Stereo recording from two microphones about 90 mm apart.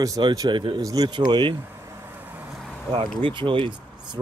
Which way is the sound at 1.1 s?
55° right (ahead or behind).